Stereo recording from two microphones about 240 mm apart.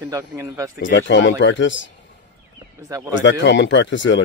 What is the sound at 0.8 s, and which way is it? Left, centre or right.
Speech, left.